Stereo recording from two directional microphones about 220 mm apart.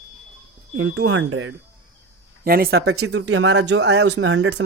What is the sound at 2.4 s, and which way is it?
Speech, 45° right (ahead or behind).